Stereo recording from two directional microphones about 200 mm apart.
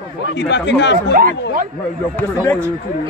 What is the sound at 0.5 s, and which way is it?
Speech, 60° left (ahead or behind).